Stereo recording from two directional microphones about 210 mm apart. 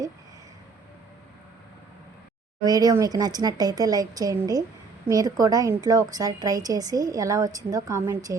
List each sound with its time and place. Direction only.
2.6 s a woman's voice: 20° right (ahead or behind)